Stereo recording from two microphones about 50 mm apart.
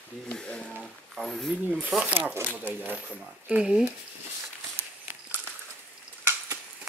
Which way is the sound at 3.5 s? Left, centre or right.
Right.